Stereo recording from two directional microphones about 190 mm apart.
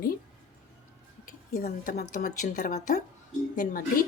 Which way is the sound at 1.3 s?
45° left (ahead or behind).